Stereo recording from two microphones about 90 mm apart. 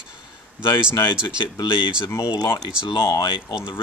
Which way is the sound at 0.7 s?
30° left (ahead or behind).